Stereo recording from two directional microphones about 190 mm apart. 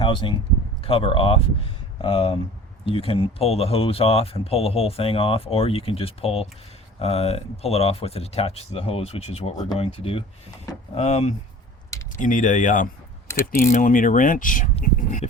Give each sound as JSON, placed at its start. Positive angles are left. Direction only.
{"t": 0.0, "sound": "speech", "side_deg": 25}
{"t": 13.3, "sound": "speech", "side_deg": 15}
{"t": 13.7, "sound": "speech", "side_deg": 40}